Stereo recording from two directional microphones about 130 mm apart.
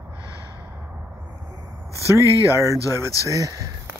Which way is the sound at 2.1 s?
25° right (ahead or behind).